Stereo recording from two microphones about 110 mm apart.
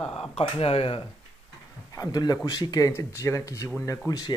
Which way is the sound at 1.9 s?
35° left (ahead or behind).